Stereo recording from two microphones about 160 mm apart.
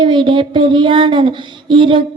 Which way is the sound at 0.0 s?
30° right (ahead or behind).